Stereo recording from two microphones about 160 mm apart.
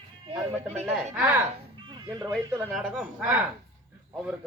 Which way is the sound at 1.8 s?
25° right (ahead or behind).